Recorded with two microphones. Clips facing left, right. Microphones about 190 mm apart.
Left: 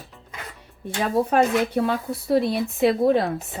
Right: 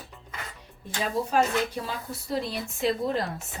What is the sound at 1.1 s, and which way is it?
Speech, 60° left (ahead or behind).